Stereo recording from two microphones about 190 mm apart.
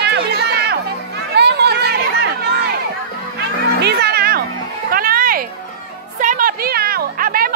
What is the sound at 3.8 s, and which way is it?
Music, 60° right (ahead or behind).